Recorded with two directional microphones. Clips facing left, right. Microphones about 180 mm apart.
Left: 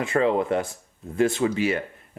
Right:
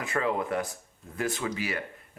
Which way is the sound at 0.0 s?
25° left (ahead or behind).